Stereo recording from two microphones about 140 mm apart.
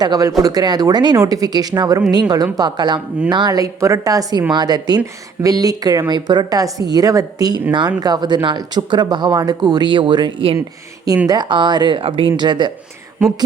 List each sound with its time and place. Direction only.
0.0 s speech: 25° right (ahead or behind)